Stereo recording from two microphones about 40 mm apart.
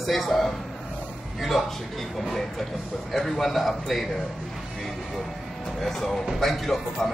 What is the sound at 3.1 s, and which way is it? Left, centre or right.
Speech, centre.